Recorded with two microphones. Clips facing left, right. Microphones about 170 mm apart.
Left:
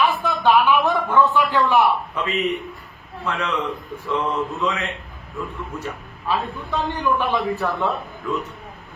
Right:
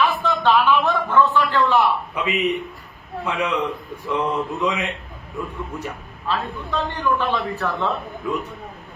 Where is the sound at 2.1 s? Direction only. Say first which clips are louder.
Right 1 dB; 15° right (ahead or behind).